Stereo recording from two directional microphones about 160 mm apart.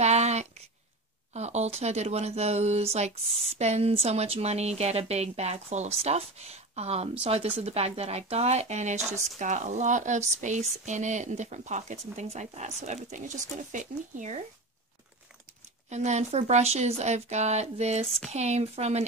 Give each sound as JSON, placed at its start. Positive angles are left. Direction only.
{"t": 0.0, "sound": "a sound", "side_deg": -45}
{"t": 1.3, "sound": "speech", "side_deg": -45}
{"t": 15.9, "sound": "speech", "side_deg": -45}